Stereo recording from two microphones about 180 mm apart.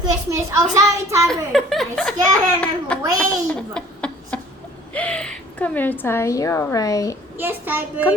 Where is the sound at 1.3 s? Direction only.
Centre (ahead or behind).